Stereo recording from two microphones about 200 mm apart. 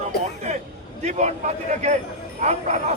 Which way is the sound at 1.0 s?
35° right (ahead or behind).